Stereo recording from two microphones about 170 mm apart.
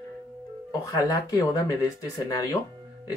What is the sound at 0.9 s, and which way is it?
Speech, 20° left (ahead or behind).